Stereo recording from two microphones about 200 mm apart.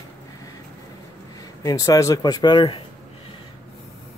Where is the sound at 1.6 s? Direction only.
15° left (ahead or behind).